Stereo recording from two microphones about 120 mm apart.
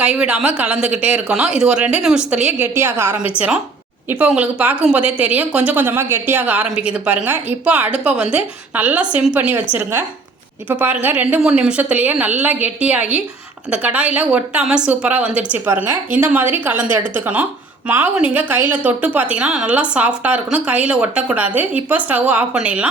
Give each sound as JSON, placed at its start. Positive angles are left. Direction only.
{"t": 0.0, "sound": "a woman's voice", "side_deg": -10}
{"t": 10.7, "sound": "a woman's voice", "side_deg": -15}